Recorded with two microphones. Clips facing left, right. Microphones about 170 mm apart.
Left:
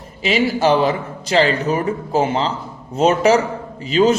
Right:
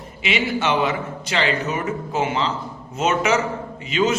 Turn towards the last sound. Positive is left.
turn(degrees=35)  # may be behind; listen again after turning